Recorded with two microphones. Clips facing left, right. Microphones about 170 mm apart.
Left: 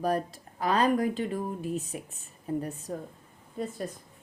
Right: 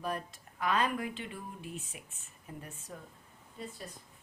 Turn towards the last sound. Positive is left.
turn(degrees=50)  # may be behind; listen again after turning